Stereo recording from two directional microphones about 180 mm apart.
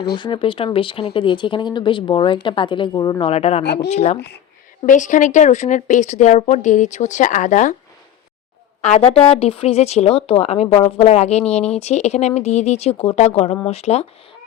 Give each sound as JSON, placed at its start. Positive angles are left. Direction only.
{"t": 0.2, "sound": "speech", "side_deg": 30}
{"t": 3.2, "sound": "speech", "side_deg": 35}
{"t": 8.8, "sound": "speech", "side_deg": 35}